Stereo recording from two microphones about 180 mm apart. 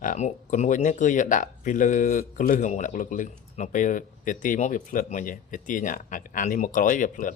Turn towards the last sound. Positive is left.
turn(degrees=45)  # may be behind; listen again after turning